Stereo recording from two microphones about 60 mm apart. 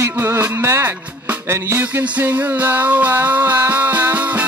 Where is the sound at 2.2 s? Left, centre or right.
Right.